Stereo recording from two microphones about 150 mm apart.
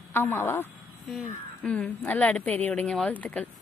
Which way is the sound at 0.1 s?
15° left (ahead or behind).